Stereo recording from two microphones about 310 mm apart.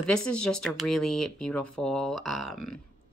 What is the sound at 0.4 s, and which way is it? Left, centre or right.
Speech, centre.